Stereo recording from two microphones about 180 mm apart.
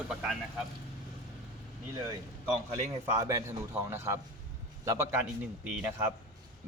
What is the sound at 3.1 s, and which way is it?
A man's voice, 20° right (ahead or behind).